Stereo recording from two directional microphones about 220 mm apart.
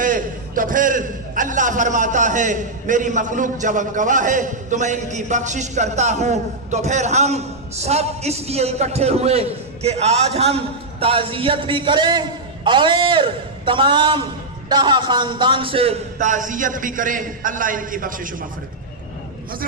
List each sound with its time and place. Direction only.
0.0 s a man's voice: 40° right (ahead or behind)